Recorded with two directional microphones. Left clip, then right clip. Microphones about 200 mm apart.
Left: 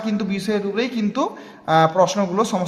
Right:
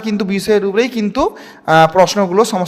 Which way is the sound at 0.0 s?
45° right (ahead or behind).